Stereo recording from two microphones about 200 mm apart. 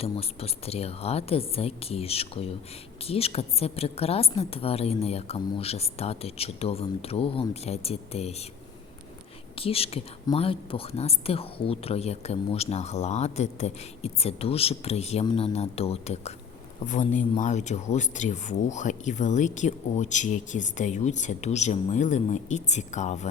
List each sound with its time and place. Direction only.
0.0 s speech: 30° left (ahead or behind)
9.6 s speech: 30° left (ahead or behind)